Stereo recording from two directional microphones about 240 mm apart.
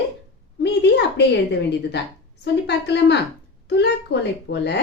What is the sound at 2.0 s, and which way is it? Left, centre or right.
A woman's voice, left.